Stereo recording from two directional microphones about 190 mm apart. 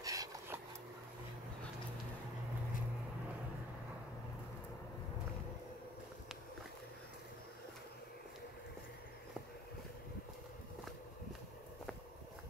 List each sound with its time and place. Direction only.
0.0 s dog: 20° right (ahead or behind)